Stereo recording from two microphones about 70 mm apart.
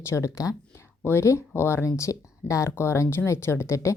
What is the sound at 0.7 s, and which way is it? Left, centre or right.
Speech, left.